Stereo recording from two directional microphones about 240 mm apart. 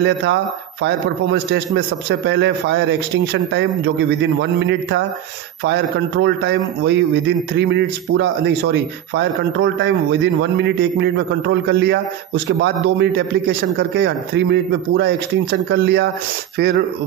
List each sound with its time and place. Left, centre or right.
0.0 s a man's voice: right